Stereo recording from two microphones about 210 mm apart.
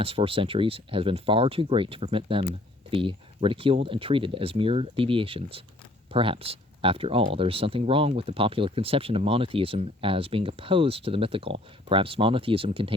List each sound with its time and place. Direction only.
0.0 s speech: 25° right (ahead or behind)